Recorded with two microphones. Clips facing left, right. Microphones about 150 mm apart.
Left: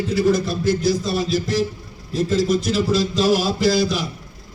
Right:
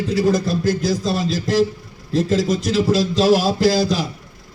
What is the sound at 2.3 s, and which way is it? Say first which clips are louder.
A man's voice: left 2 dB; 40° right (ahead or behind).